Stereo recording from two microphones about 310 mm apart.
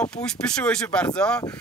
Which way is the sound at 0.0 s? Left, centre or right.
Centre.